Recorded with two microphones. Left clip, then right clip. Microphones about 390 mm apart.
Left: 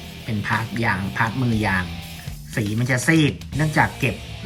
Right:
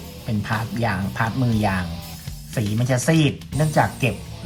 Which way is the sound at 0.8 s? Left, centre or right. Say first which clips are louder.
Left 1 dB; centre.